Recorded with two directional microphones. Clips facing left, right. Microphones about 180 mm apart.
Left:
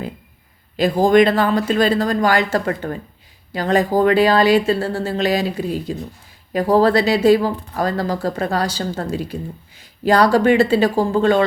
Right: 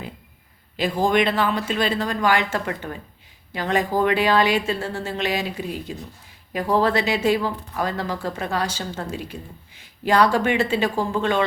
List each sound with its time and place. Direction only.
0.8 s speech: 40° left (ahead or behind)